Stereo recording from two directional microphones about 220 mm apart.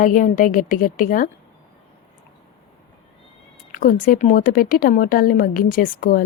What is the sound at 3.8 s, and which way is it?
Speech, 40° left (ahead or behind).